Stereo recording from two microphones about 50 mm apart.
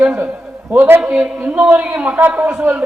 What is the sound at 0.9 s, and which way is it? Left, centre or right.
Speech, right.